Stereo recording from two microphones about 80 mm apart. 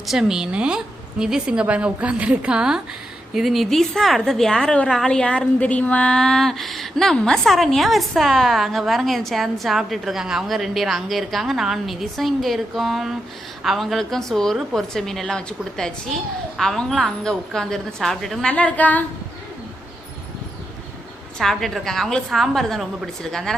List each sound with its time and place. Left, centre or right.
0.1 s a woman's voice: centre
18.5 s a woman's voice: centre
21.3 s a woman's voice: centre